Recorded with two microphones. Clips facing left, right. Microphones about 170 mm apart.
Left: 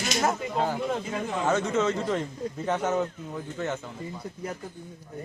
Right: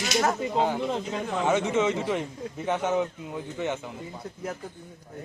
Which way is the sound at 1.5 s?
15° right (ahead or behind).